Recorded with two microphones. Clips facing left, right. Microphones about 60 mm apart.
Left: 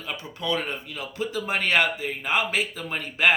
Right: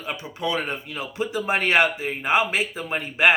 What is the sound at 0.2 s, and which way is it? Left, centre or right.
Speech, centre.